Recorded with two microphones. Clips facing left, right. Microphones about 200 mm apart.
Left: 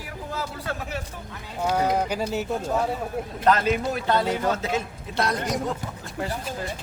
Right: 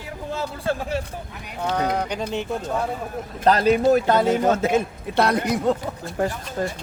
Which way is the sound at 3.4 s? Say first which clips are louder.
Right 5 dB; 35° right (ahead or behind).